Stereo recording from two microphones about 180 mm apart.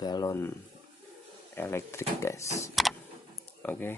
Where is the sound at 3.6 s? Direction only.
10° left (ahead or behind).